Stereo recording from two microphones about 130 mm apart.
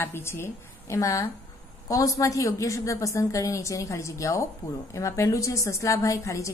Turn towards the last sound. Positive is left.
turn(degrees=25)  # may be behind; listen again after turning